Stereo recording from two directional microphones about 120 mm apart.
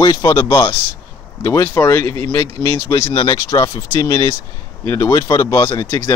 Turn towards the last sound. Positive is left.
turn(degrees=30)  # may be behind; listen again after turning